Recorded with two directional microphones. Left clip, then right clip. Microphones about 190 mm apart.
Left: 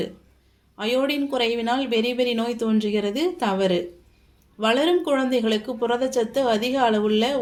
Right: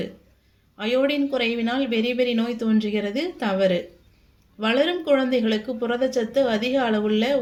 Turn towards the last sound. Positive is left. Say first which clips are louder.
# left 2 dB
turn(degrees=25)  # may be behind; listen again after turning